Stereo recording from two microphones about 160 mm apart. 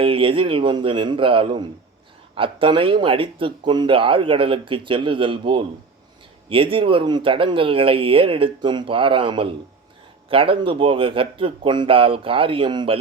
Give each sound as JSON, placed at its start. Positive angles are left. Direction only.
{"t": 0.0, "sound": "speech", "side_deg": -35}